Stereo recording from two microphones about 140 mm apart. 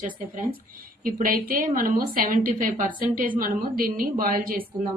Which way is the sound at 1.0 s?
85° right.